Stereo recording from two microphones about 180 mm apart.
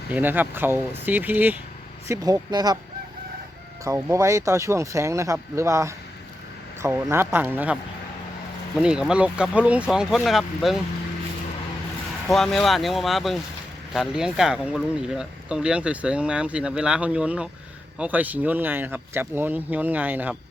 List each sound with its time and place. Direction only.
0.1 s speech: 10° right (ahead or behind)
3.8 s speech: 15° right (ahead or behind)
8.8 s speech: 5° right (ahead or behind)
12.3 s speech: centre (ahead or behind)